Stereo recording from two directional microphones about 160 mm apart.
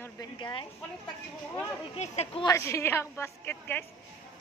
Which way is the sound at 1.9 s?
45° left (ahead or behind).